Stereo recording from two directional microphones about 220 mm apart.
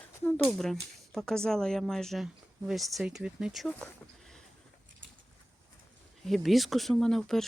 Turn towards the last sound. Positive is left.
turn(degrees=0)  # may be behind; listen again after turning